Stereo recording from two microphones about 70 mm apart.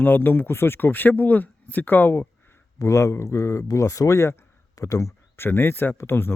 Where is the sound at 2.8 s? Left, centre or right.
Left.